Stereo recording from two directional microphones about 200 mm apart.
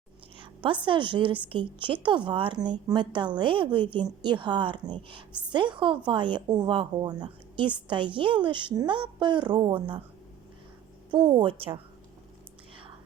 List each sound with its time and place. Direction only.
0.3 s a sound: 25° right (ahead or behind)
0.9 s a woman's voice: 25° right (ahead or behind)
11.1 s a woman's voice: 25° right (ahead or behind)